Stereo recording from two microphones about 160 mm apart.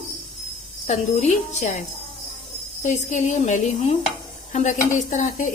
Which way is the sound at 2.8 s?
50° left (ahead or behind).